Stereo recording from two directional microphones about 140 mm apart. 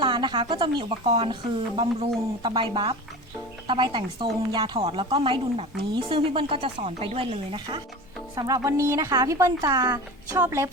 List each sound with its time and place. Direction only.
0.0 s a woman's voice: 35° right (ahead or behind)
8.4 s speech: 25° right (ahead or behind)